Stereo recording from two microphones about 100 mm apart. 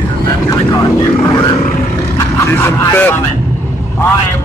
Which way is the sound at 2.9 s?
20° left (ahead or behind).